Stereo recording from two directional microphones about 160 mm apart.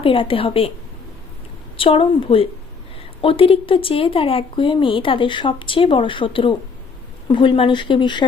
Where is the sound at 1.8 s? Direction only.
35° left (ahead or behind).